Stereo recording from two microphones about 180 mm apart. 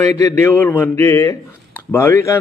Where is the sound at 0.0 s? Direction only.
15° left (ahead or behind).